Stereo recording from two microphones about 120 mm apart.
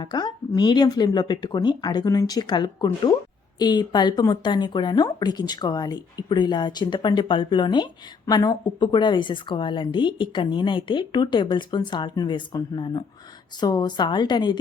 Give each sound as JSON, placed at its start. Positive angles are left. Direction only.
{"t": 0.0, "sound": "speech", "side_deg": 35}